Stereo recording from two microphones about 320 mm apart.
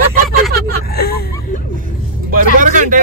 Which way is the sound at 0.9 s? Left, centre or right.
Left.